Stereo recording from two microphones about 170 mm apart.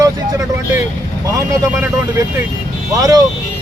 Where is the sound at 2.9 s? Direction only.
20° right (ahead or behind).